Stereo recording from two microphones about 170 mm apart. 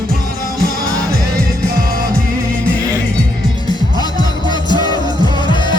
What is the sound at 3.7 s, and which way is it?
Music, 25° left (ahead or behind).